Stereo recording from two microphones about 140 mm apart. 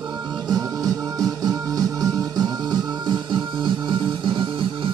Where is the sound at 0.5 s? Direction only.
25° right (ahead or behind).